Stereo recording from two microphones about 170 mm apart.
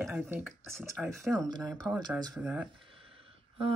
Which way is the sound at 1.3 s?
20° right (ahead or behind).